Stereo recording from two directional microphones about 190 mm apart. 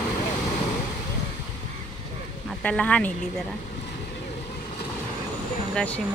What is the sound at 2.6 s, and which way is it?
Speech, 5° left (ahead or behind).